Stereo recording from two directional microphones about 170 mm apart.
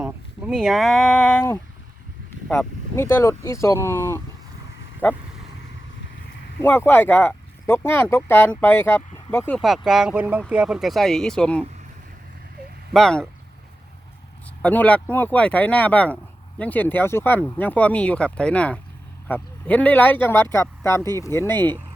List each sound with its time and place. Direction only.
0.0 s a sound: 5° right (ahead or behind)
2.9 s speech: 15° left (ahead or behind)
6.6 s speech: 10° left (ahead or behind)
9.6 s speech: centre (ahead or behind)
12.9 s speech: 5° left (ahead or behind)
14.6 s speech: 10° left (ahead or behind)